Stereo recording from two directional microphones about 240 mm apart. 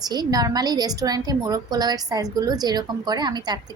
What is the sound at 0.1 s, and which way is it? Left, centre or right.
A woman's voice, centre.